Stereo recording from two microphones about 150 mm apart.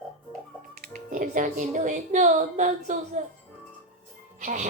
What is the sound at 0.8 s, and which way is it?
Speech, 60° right (ahead or behind).